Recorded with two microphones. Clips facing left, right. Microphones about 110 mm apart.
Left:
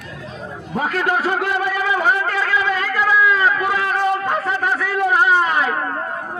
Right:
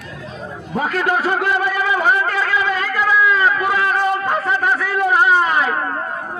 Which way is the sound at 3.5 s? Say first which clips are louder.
Right 2 dB; 15° right (ahead or behind).